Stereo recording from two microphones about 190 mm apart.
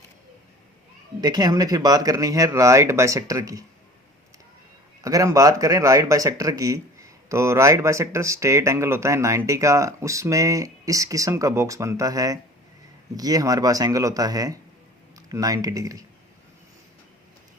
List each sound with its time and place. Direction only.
1.2 s speech: 20° right (ahead or behind)
5.0 s speech: 15° right (ahead or behind)